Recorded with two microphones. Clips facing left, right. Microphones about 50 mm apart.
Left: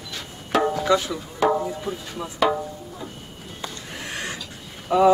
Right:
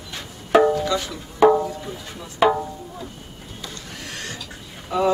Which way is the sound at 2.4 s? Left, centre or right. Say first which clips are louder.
Right 3 dB; right.